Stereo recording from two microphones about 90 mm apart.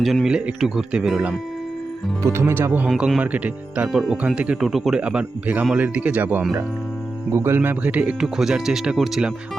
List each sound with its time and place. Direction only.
0.0 s speech: centre (ahead or behind)
2.2 s speech: 30° right (ahead or behind)
3.9 s speech: centre (ahead or behind)
8.2 s speech: 5° right (ahead or behind)